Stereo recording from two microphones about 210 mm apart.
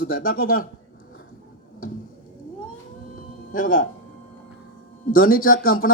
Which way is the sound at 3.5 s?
40° left (ahead or behind).